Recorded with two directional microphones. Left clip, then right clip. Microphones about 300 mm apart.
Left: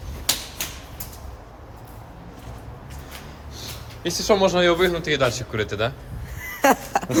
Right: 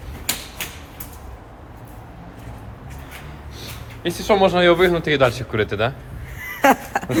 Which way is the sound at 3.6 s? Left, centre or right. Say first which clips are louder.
Right 1 dB; centre.